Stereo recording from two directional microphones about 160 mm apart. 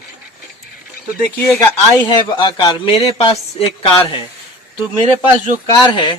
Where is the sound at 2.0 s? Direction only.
30° left (ahead or behind).